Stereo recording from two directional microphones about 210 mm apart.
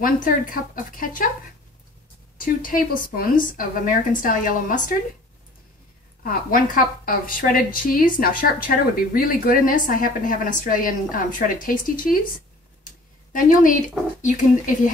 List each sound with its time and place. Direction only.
0.0 s a woman's voice: 40° left (ahead or behind)
2.3 s a woman's voice: 40° left (ahead or behind)
6.2 s a woman's voice: 40° left (ahead or behind)
14.2 s a woman's voice: 35° left (ahead or behind)